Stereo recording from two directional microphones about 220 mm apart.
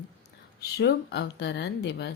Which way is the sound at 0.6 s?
45° left (ahead or behind).